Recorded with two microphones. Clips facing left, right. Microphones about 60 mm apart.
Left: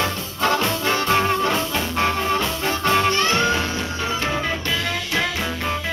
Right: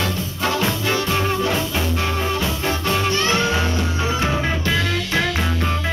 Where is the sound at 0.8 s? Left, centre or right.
Left.